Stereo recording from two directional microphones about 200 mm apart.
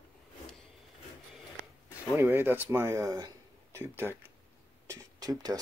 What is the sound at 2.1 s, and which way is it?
Speech, 10° right (ahead or behind).